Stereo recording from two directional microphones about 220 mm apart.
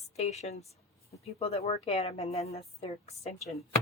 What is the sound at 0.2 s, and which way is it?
A woman's voice, 30° left (ahead or behind).